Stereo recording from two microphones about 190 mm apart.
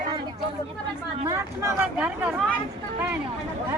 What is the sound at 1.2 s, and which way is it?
Speech, 15° right (ahead or behind).